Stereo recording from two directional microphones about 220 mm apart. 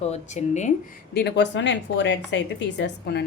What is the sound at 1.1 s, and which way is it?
A woman's voice, 50° left (ahead or behind).